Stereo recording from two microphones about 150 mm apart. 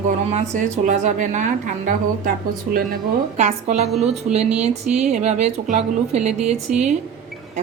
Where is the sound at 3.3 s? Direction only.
50° right (ahead or behind).